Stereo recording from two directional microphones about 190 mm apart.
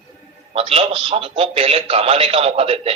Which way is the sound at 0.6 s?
30° right (ahead or behind).